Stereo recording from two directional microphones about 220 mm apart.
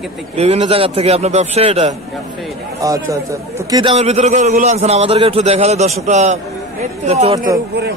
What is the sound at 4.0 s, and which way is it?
A man's voice, 30° right (ahead or behind).